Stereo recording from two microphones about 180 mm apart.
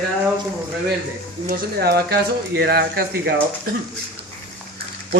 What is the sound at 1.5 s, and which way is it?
Speech, 60° right (ahead or behind).